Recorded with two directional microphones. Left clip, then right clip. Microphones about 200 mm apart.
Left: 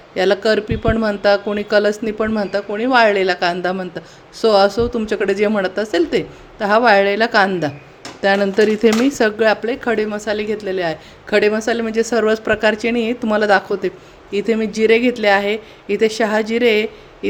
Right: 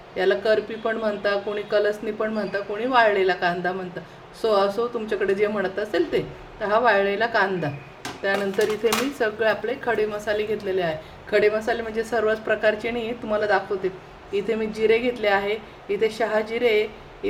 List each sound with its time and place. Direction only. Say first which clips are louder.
0.2 s speech: left 5 dB; 50° left (ahead or behind)